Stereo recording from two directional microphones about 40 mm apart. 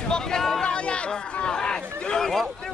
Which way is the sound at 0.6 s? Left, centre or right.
Left.